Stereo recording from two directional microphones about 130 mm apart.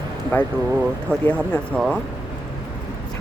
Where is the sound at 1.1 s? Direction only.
10° left (ahead or behind).